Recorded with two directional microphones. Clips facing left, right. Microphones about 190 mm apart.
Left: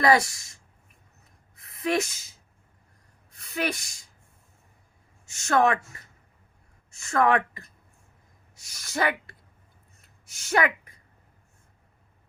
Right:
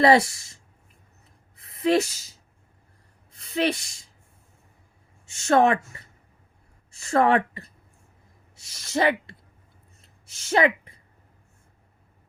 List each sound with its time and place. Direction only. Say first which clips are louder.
0.0 s speech: right 4 dB; 30° right (ahead or behind)
3.3 s speech: right 5 dB; 25° right (ahead or behind)
5.2 s a woman's voice: right 3 dB; 30° right (ahead or behind)
10.0 s a sound: right 1 dB; 25° right (ahead or behind)